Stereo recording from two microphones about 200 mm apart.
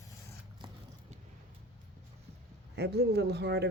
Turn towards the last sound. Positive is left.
turn(degrees=-55)  # may be behind; listen again after turning